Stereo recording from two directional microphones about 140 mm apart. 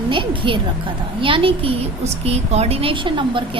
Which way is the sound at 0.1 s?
35° right (ahead or behind).